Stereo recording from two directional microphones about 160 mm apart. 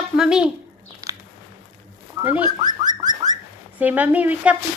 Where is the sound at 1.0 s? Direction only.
20° right (ahead or behind).